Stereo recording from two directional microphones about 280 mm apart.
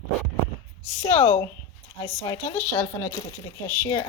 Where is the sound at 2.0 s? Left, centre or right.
Centre.